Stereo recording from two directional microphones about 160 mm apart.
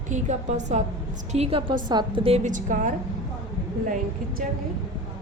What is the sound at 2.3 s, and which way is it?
Speech, 50° right (ahead or behind).